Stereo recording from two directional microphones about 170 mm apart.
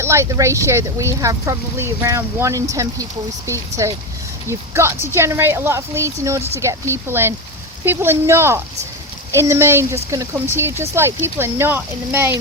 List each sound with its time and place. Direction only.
0.0 s speech: 15° right (ahead or behind)